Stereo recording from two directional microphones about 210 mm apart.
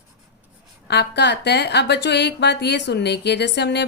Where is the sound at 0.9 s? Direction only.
55° left (ahead or behind).